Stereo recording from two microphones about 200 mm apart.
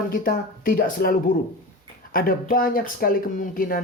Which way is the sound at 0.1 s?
45° left (ahead or behind).